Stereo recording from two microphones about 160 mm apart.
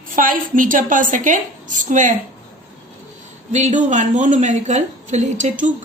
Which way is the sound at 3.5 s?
45° right (ahead or behind).